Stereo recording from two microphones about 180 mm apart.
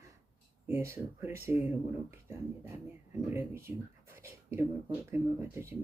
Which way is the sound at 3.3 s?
15° right (ahead or behind).